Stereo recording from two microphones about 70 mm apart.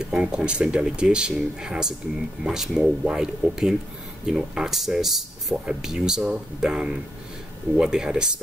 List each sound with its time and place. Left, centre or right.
0.0 s speech: centre